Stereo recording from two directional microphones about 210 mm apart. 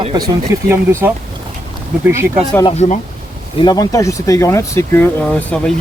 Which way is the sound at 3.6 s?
20° left (ahead or behind).